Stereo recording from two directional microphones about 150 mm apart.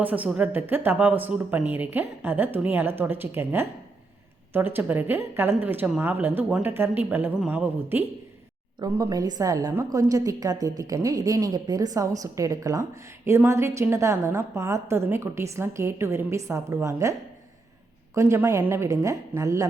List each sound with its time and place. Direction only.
0.0 s speech: 10° right (ahead or behind)
8.8 s a woman's voice: 25° right (ahead or behind)